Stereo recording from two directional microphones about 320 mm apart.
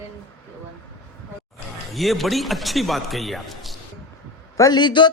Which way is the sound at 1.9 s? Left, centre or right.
Centre.